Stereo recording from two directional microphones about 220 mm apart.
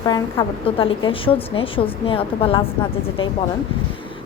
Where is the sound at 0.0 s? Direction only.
20° left (ahead or behind).